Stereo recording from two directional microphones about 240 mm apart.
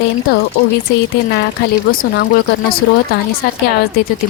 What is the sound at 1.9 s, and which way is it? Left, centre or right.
Speech, left.